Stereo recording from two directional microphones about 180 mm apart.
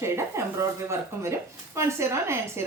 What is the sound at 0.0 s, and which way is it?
Speech, 15° right (ahead or behind).